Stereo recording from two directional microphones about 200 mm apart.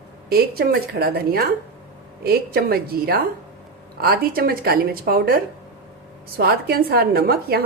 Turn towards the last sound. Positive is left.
turn(degrees=-50)  # may be behind; listen again after turning